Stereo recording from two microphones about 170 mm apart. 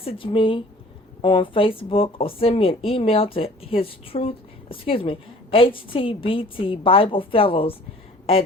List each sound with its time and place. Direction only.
0.0 s a woman's voice: 35° left (ahead or behind)